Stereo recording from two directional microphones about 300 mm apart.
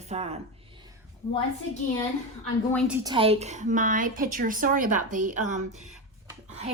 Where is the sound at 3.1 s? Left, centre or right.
Centre.